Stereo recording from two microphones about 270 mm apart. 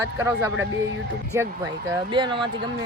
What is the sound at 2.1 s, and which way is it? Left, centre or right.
Speech, centre.